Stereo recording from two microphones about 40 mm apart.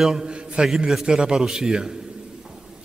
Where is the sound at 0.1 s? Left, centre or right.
Centre.